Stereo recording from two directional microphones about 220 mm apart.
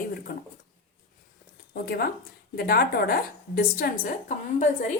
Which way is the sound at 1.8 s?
45° left (ahead or behind).